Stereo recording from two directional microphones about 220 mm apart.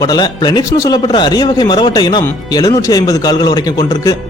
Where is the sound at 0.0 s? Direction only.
20° left (ahead or behind).